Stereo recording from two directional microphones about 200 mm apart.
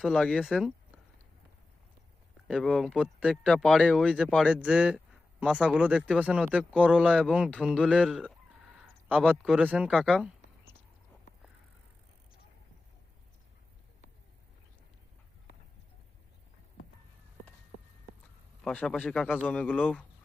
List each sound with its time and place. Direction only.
0.0 s speech: centre (ahead or behind)
2.5 s speech: centre (ahead or behind)
18.6 s speech: 5° left (ahead or behind)